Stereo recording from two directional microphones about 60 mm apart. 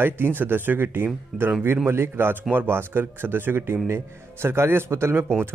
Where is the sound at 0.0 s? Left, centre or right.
Right.